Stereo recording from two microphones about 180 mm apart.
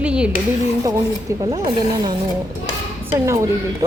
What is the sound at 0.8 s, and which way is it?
Speech, 15° right (ahead or behind).